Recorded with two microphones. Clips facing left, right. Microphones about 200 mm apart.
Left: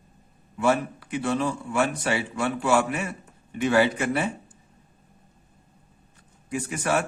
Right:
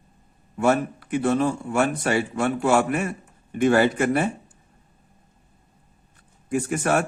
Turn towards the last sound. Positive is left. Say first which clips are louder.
# right 3 dB
turn(degrees=-45)  # may be behind; listen again after turning